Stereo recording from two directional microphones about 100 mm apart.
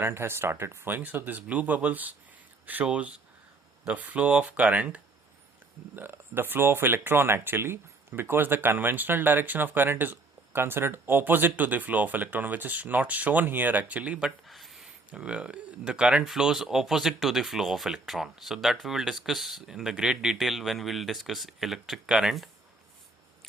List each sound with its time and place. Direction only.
0.0 s speech: 25° right (ahead or behind)
6.0 s speech: 20° right (ahead or behind); by 22.4 s 5° right (ahead or behind)